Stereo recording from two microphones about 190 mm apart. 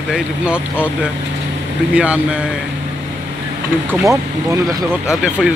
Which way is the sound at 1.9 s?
5° right (ahead or behind).